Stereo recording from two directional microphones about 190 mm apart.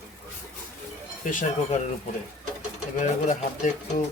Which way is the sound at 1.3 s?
45° left (ahead or behind).